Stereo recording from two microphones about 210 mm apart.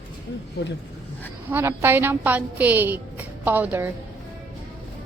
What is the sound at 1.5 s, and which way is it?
A woman's voice, 10° right (ahead or behind).